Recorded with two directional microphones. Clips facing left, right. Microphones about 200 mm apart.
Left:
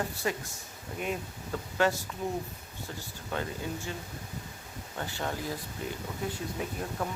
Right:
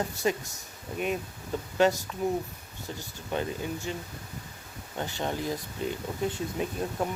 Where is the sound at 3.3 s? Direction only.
15° right (ahead or behind).